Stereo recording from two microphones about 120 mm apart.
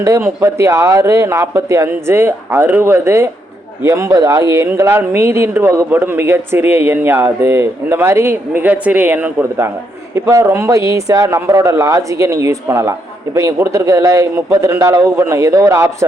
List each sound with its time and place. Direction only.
0.0 s a man's voice: 25° right (ahead or behind)